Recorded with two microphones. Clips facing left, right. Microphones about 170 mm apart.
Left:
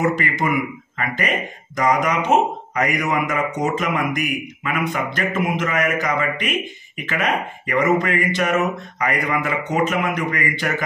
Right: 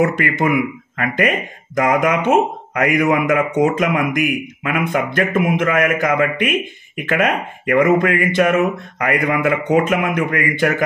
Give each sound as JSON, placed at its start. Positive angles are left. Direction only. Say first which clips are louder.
{"t": 0.0, "sound": "speech", "louder": "right 4 dB", "side_deg": -55}